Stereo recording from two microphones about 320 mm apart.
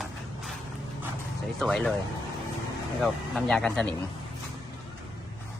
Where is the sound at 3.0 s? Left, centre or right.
Centre.